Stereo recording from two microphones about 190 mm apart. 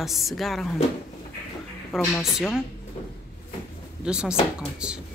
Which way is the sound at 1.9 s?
Centre (ahead or behind).